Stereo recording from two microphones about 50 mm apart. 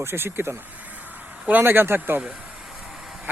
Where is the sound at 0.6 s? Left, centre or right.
Right.